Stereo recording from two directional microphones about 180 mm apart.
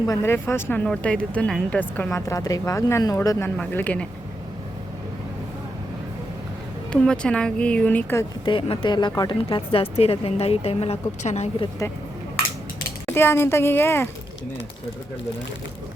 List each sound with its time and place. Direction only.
0.0 s speech: 15° left (ahead or behind)
6.9 s speech: 5° left (ahead or behind)
8.4 s a woman's voice: 30° left (ahead or behind)
11.8 s speech: 15° left (ahead or behind)
13.1 s speech: 15° left (ahead or behind)